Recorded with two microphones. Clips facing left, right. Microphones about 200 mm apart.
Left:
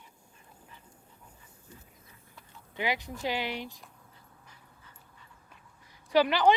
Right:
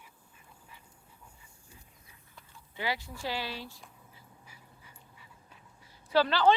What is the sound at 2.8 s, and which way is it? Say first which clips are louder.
Speech: left 3 dB; 20° left (ahead or behind).